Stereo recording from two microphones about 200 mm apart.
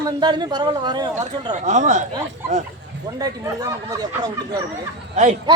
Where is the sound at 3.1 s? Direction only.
20° right (ahead or behind).